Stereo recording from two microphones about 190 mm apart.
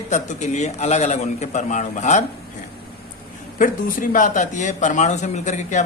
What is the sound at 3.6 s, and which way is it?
A man's voice, 45° left (ahead or behind).